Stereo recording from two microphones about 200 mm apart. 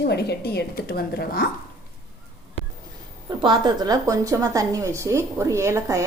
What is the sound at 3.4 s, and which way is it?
A woman's voice, 20° right (ahead or behind).